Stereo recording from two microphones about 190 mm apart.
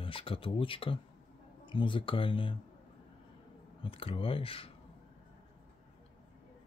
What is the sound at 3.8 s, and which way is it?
Speech, 30° left (ahead or behind).